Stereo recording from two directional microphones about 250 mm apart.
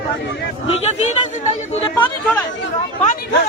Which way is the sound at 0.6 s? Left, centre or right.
Left.